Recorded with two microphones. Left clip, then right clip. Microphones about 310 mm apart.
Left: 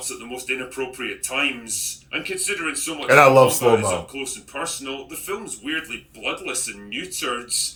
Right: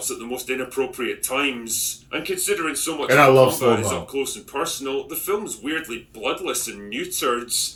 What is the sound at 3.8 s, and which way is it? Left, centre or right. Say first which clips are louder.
Speech: even; right.